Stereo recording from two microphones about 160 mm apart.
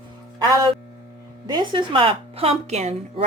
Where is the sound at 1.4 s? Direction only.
30° right (ahead or behind).